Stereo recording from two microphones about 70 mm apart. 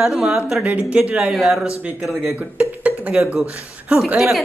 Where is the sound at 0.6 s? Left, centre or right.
Centre.